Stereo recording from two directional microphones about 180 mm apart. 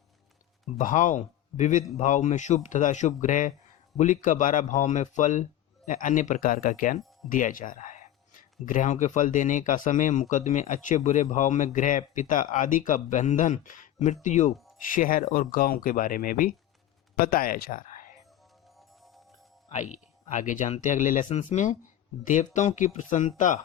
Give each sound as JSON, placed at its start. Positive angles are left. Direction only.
{"t": 0.8, "sound": "speech", "side_deg": 45}
{"t": 19.7, "sound": "speech", "side_deg": 40}